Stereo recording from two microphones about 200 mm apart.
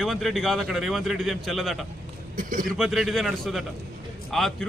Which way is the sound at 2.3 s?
40° right (ahead or behind).